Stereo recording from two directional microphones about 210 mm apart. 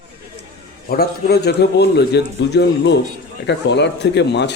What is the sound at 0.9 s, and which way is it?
A man's voice, 50° left (ahead or behind).